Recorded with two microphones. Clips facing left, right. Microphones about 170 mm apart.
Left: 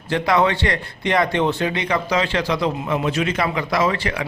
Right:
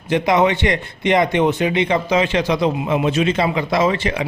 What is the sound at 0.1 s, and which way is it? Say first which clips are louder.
A man's voice: right 3 dB; 20° right (ahead or behind).